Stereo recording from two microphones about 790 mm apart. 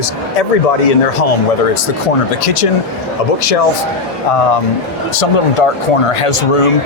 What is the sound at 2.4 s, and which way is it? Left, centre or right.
Speech, left.